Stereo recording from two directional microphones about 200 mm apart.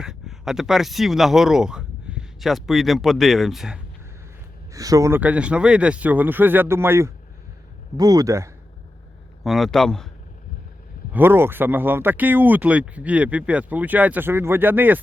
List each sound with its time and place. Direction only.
0.0 s speech: centre (ahead or behind)
4.7 s speech: 15° right (ahead or behind)
9.4 s speech: centre (ahead or behind)
11.1 s speech: 10° right (ahead or behind)